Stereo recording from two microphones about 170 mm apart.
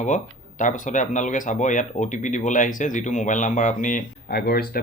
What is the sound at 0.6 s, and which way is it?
Speech, 45° left (ahead or behind).